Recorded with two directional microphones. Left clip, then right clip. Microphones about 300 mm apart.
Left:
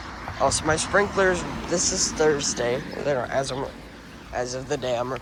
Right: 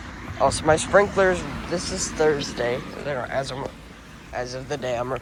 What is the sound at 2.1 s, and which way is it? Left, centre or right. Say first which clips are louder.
Speech: right 2 dB; centre.